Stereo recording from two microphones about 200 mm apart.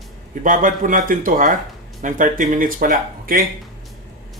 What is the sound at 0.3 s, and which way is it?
Speech, 40° right (ahead or behind).